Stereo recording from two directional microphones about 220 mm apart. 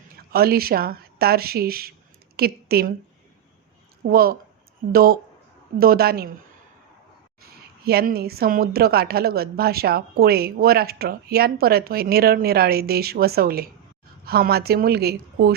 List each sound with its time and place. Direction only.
0.3 s a woman's voice: 45° right (ahead or behind)
4.0 s a woman's voice: 45° right (ahead or behind)
7.9 s a woman's voice: 45° right (ahead or behind)